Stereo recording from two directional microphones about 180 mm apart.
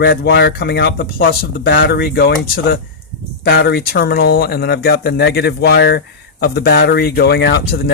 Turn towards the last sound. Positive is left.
turn(degrees=65)  # may be behind; listen again after turning